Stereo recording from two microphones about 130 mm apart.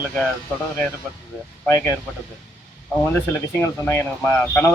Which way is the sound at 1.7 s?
20° left (ahead or behind).